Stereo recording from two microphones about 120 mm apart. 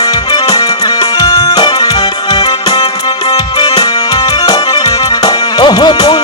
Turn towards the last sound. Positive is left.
turn(degrees=40)  # may be behind; listen again after turning